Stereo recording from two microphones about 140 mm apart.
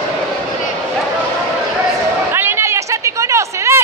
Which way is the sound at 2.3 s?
15° right (ahead or behind).